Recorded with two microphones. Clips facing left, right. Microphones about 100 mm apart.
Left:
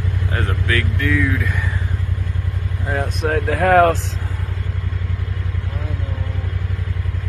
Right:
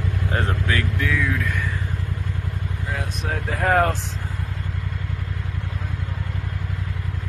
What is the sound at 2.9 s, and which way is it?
Speech, 55° left (ahead or behind).